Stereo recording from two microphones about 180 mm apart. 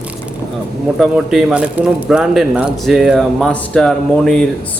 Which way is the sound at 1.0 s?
5° right (ahead or behind).